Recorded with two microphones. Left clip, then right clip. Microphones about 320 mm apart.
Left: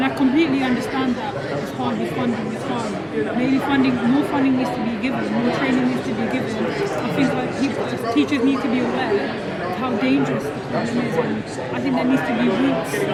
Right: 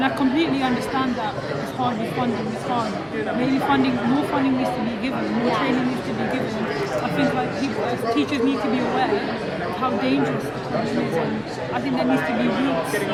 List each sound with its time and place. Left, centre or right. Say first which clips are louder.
0.0 s a sound: left 2 dB; centre
3.4 s speech: even; centre
8.1 s speech: left 5 dB; centre